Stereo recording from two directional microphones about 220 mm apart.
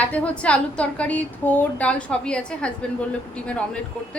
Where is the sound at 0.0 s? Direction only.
5° left (ahead or behind).